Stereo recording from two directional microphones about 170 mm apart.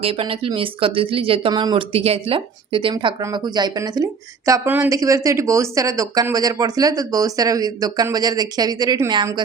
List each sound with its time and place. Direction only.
0.0 s speech: 35° right (ahead or behind)